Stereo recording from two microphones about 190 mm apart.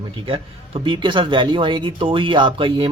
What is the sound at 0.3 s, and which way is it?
Speech, 25° right (ahead or behind).